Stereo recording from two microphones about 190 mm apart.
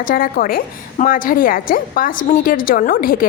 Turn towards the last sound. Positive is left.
turn(degrees=50)  # may be behind; listen again after turning